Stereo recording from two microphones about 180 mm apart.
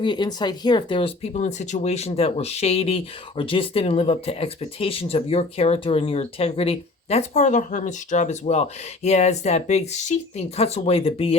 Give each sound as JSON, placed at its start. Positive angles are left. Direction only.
{"t": 0.0, "sound": "speech", "side_deg": 25}